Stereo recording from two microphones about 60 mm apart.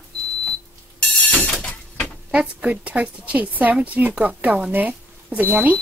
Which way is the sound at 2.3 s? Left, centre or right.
Right.